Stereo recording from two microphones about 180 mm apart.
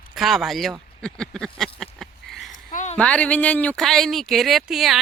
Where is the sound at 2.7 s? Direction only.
45° left (ahead or behind).